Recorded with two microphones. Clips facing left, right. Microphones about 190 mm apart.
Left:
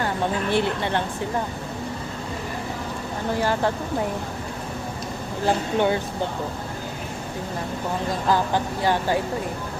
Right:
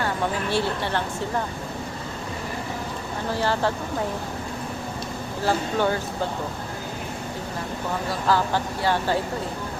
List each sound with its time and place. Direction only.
0.5 s speech: 20° left (ahead or behind)
3.3 s speech: 15° left (ahead or behind)
5.5 s speech: 20° left (ahead or behind)
8.3 s speech: 15° left (ahead or behind)